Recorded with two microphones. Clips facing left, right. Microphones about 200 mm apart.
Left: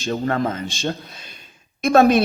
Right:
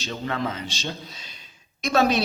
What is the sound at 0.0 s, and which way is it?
A man's voice, 45° left (ahead or behind).